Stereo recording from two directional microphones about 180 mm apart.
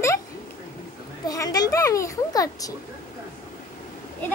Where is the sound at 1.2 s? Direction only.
20° left (ahead or behind).